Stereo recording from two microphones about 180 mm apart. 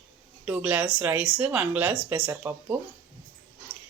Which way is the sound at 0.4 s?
5° right (ahead or behind).